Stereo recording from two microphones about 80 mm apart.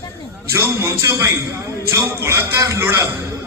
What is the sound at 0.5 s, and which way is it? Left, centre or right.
A man's voice, right.